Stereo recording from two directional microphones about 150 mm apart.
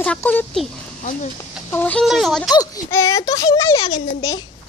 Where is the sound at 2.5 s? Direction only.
20° left (ahead or behind).